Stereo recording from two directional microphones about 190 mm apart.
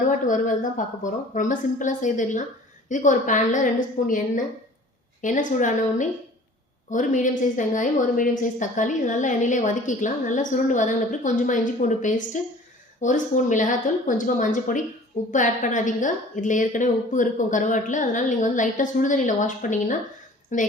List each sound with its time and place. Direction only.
0.1 s a woman's voice: 45° left (ahead or behind)